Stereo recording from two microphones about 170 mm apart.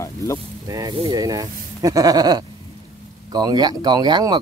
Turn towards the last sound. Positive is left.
turn(degrees=-25)  # may be behind; listen again after turning